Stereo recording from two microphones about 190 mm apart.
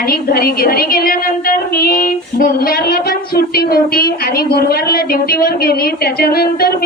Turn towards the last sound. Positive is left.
turn(degrees=55)  # may be behind; listen again after turning